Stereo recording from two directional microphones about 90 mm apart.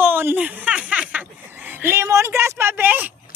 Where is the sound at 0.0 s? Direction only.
25° right (ahead or behind).